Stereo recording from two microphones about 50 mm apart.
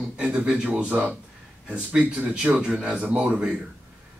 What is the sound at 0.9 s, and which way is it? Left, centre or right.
Speech, right.